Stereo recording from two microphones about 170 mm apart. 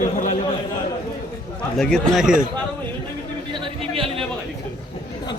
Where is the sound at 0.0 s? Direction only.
50° left (ahead or behind).